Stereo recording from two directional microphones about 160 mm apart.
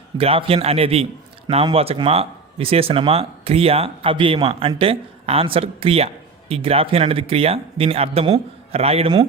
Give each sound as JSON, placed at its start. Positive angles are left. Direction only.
{"t": 0.2, "sound": "speech", "side_deg": -35}